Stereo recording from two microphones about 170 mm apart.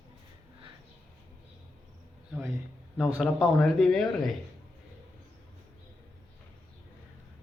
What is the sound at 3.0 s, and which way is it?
Speech, centre (ahead or behind).